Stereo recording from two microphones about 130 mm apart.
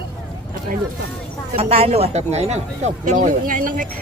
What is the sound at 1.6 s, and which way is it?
Speech, 45° right (ahead or behind).